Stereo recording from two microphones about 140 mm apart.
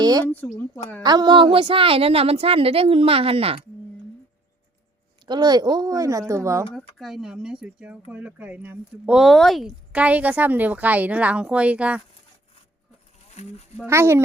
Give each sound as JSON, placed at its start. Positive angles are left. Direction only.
{"t": 0.0, "sound": "a sound", "side_deg": -30}
{"t": 0.3, "sound": "a woman's voice", "side_deg": 10}
{"t": 1.0, "sound": "a woman's voice", "side_deg": -30}
{"t": 5.2, "sound": "speech", "side_deg": -30}
{"t": 6.7, "sound": "speech", "side_deg": 0}
{"t": 13.3, "sound": "speech", "side_deg": 50}
{"t": 13.8, "sound": "speech", "side_deg": -20}